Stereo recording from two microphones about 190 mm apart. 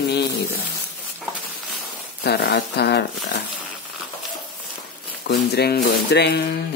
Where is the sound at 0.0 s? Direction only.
60° left (ahead or behind).